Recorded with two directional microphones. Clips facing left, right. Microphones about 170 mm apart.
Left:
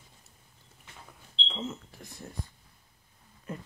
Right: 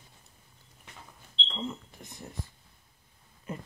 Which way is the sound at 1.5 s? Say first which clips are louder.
Even; 5° left (ahead or behind).